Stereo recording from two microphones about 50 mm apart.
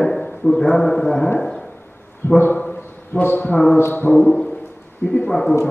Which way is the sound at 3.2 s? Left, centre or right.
Left.